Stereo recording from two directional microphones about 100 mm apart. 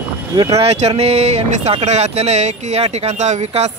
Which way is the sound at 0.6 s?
90° right.